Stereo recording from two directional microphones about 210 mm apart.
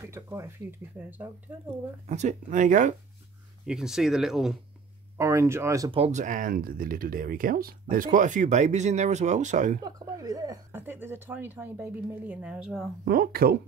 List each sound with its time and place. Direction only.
0.0 s speech: 15° right (ahead or behind)
2.0 s speech: 35° right (ahead or behind)
3.6 s speech: 5° right (ahead or behind)
5.1 s speech: 15° right (ahead or behind)
5.9 s speech: 30° right (ahead or behind)
9.8 s speech: 15° right (ahead or behind)
13.0 s speech: 45° right (ahead or behind)